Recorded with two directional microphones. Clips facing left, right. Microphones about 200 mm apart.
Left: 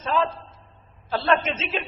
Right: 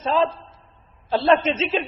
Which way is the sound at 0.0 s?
30° right (ahead or behind).